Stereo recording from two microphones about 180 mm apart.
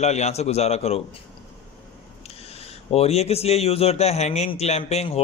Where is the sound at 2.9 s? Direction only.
35° left (ahead or behind).